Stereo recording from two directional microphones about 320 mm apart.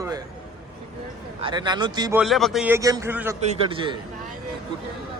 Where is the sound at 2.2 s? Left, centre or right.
Centre.